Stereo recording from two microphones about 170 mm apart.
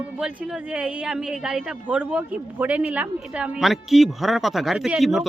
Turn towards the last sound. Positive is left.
turn(degrees=0)  # may be behind; listen again after turning